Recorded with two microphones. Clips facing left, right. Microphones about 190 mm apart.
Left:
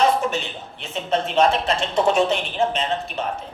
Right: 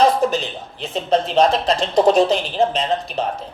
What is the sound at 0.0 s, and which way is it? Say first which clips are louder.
Speech: right 4 dB; 35° right (ahead or behind).